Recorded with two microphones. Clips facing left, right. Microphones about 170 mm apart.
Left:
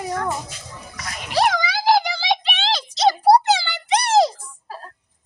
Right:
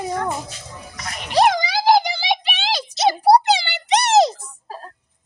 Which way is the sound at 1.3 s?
20° right (ahead or behind).